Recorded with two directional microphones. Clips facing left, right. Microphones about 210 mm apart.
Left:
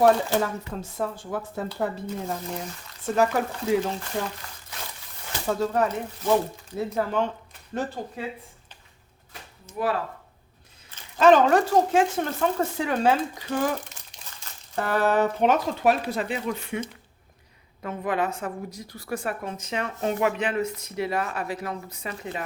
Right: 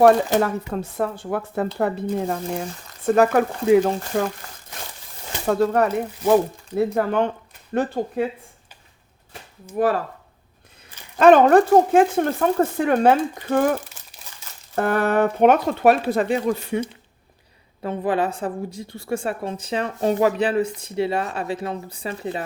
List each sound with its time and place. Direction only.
0.7 s speech: 65° right (ahead or behind)
5.5 s speech: 65° right (ahead or behind)
9.7 s speech: 45° right (ahead or behind)
11.2 s speech: 55° right (ahead or behind)
14.0 s crumpling: 5° right (ahead or behind)
14.8 s speech: 55° right (ahead or behind)
16.0 s speech: 45° right (ahead or behind)
17.8 s a woman's voice: 30° right (ahead or behind)